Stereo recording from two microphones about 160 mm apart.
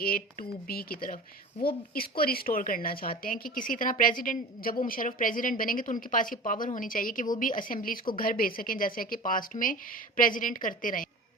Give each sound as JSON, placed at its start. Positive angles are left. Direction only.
{"t": 0.0, "sound": "a woman's voice", "side_deg": 70}